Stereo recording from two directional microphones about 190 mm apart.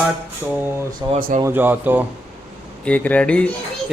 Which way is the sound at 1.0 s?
20° right (ahead or behind).